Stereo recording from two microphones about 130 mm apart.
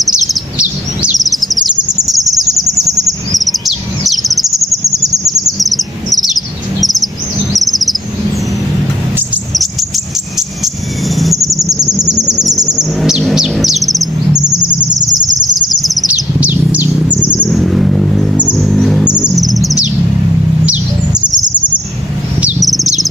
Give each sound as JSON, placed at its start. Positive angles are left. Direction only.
{"t": 0.0, "sound": "bird vocalization", "side_deg": -5}
{"t": 3.3, "sound": "chirp", "side_deg": 0}
{"t": 4.1, "sound": "bird vocalization", "side_deg": 0}
{"t": 5.2, "sound": "chirp", "side_deg": 0}
{"t": 6.8, "sound": "bird vocalization", "side_deg": 0}
{"t": 7.5, "sound": "insect", "side_deg": 0}
{"t": 9.5, "sound": "cricket", "side_deg": 0}
{"t": 11.9, "sound": "chirp", "side_deg": -5}
{"t": 15.8, "sound": "a sound", "side_deg": 0}
{"t": 16.1, "sound": "bird", "side_deg": -10}
{"t": 17.5, "sound": "a sound", "side_deg": 0}
{"t": 18.6, "sound": "vehicle", "side_deg": 0}
{"t": 20.6, "sound": "chirp", "side_deg": -10}
{"t": 22.6, "sound": "chirp", "side_deg": 0}